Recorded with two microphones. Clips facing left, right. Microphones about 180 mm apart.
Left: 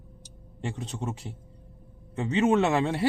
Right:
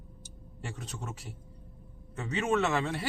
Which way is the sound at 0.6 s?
30° left (ahead or behind).